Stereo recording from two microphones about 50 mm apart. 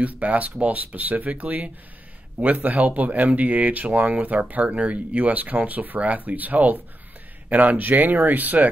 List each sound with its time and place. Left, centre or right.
0.0 s speech: right